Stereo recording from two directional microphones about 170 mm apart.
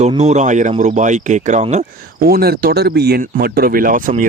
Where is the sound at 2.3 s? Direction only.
65° right (ahead or behind).